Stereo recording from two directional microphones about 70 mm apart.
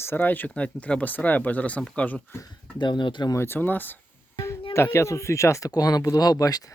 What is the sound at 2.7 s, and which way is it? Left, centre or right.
Speech, left.